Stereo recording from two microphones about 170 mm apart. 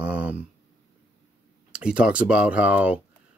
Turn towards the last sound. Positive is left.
turn(degrees=-10)  # may be behind; listen again after turning